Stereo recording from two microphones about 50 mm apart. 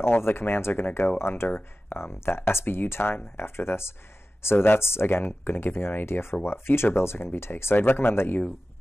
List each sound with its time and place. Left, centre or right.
0.0 s speech: left